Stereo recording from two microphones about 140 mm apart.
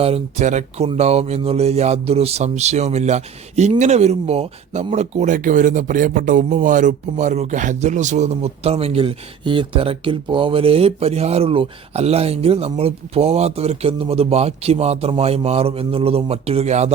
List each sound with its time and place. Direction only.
0.0 s speech: 50° right (ahead or behind)